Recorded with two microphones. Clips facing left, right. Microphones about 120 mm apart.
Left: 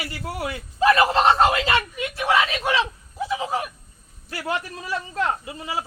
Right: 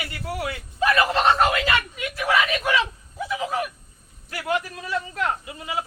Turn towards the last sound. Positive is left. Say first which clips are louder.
# even
turn(degrees=30)  # may be behind; listen again after turning